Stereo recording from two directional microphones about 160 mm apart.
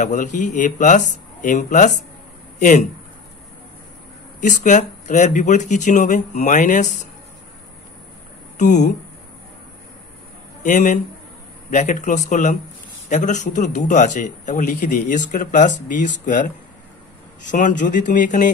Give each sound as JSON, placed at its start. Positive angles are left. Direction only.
{"t": 0.0, "sound": "a man's voice", "side_deg": 50}
{"t": 4.4, "sound": "a man's voice", "side_deg": 50}
{"t": 8.5, "sound": "a man's voice", "side_deg": 50}
{"t": 10.6, "sound": "a man's voice", "side_deg": 50}